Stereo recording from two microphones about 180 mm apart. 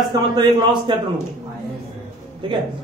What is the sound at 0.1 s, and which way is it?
Speech, 25° right (ahead or behind).